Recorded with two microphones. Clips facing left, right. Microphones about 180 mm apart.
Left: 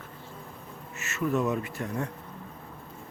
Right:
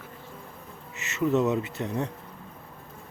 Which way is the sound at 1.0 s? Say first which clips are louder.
Right 3 dB; 20° right (ahead or behind).